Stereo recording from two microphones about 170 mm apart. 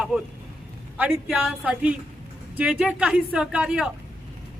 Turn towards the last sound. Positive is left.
turn(degrees=-5)  # may be behind; listen again after turning